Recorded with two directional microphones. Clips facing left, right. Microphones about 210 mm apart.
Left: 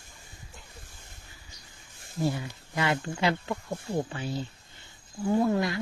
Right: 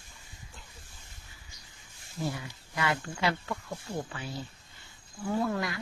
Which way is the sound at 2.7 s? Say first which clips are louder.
Left 3 dB; 25° left (ahead or behind).